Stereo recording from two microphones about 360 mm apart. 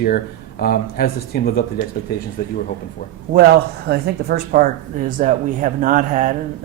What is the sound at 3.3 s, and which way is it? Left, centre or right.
Speech, right.